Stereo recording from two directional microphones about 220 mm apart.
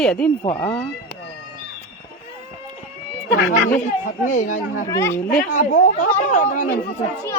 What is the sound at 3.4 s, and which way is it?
Speech, 45° left (ahead or behind).